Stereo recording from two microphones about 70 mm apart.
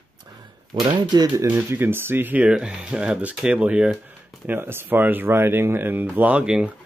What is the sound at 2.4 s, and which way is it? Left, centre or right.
Speech, centre.